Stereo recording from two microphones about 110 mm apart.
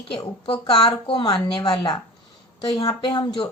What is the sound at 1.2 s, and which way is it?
A woman's voice, 35° left (ahead or behind).